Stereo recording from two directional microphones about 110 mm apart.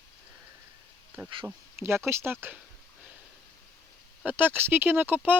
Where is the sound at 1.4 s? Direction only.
20° right (ahead or behind).